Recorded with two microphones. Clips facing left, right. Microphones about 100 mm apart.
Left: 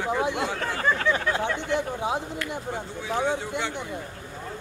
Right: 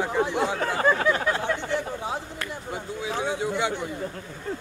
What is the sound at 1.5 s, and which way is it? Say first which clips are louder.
Speech: left 2 dB; 15° left (ahead or behind).